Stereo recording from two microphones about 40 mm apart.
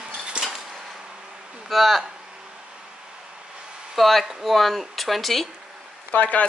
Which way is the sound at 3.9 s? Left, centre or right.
Centre.